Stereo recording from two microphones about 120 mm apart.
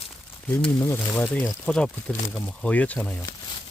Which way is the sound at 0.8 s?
20° left (ahead or behind).